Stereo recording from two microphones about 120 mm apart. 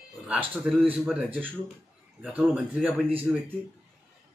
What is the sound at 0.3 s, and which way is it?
Speech, 10° right (ahead or behind).